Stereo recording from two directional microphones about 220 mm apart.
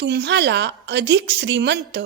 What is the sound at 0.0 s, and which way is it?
A woman's voice, 50° right (ahead or behind).